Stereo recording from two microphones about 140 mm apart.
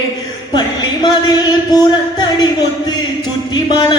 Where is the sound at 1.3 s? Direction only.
30° left (ahead or behind).